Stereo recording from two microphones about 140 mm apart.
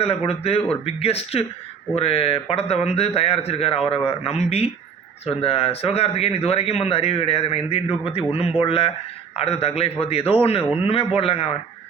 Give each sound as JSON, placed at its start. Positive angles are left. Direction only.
{"t": 0.0, "sound": "a man's voice", "side_deg": 45}